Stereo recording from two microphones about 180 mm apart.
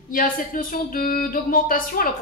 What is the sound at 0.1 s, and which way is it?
A woman's voice, 50° left (ahead or behind).